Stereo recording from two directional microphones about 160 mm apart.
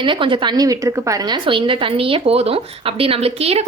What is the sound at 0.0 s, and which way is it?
A woman's voice, 30° right (ahead or behind).